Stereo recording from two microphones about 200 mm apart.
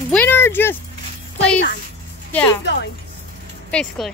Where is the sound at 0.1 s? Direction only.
10° left (ahead or behind).